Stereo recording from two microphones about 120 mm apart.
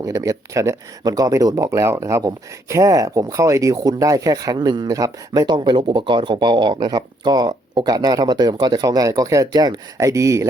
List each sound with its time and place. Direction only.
0.0 s speech: 30° right (ahead or behind)